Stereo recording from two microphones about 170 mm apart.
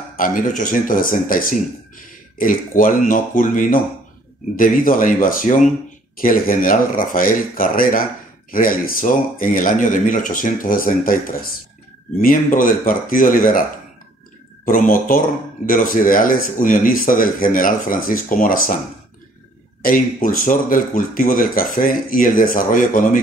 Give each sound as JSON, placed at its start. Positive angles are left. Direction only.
{"t": 0.2, "sound": "speech", "side_deg": 50}
{"t": 19.8, "sound": "speech", "side_deg": 55}